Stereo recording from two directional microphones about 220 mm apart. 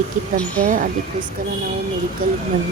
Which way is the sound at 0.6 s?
35° right (ahead or behind).